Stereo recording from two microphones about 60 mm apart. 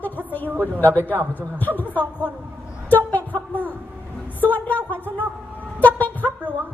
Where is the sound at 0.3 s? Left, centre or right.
Left.